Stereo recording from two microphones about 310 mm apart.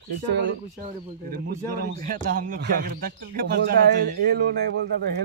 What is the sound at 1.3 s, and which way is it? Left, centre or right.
A man's voice, right.